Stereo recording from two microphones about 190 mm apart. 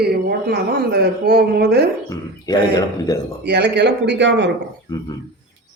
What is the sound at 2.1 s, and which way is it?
A man's voice, 20° left (ahead or behind).